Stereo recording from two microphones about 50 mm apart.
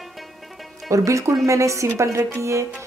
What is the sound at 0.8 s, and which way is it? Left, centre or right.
Speech, right.